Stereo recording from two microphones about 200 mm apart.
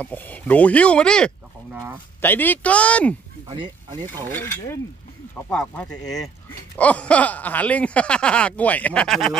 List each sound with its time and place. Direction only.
0.0 s speech: 5° left (ahead or behind)
1.7 s speech: 10° right (ahead or behind)
2.2 s speech: 10° left (ahead or behind)
3.4 s speech: 25° right (ahead or behind)
4.3 s speech: 10° left (ahead or behind)